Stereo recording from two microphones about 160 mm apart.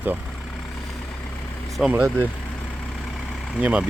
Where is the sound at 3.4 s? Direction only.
5° right (ahead or behind).